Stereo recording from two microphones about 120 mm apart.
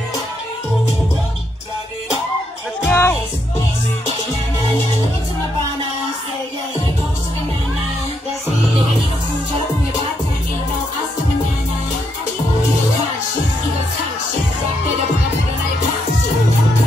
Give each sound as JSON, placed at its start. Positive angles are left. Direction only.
{"t": 2.8, "sound": "music", "side_deg": 20}